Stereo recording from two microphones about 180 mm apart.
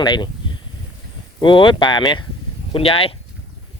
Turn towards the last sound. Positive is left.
turn(degrees=30)  # may be behind; listen again after turning